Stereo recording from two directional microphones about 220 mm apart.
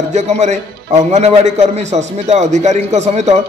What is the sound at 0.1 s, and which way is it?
A man's voice, 30° right (ahead or behind).